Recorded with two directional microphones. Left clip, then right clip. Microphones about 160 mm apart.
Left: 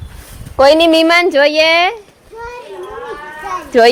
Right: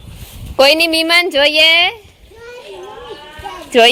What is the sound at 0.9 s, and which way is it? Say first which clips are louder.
A woman's voice: left 3 dB; 10° right (ahead or behind).